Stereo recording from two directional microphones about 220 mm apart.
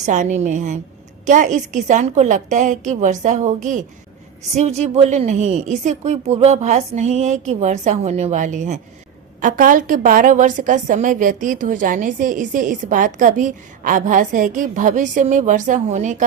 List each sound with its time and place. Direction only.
0.0 s a woman's voice: 35° right (ahead or behind)